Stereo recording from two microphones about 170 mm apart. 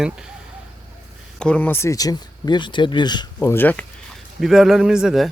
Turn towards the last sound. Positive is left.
turn(degrees=-5)  # may be behind; listen again after turning